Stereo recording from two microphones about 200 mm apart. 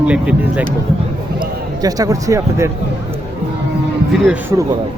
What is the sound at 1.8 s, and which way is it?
Speech, 15° right (ahead or behind).